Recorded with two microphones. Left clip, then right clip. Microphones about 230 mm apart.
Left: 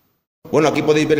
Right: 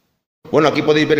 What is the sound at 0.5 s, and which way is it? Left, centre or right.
Speech, centre.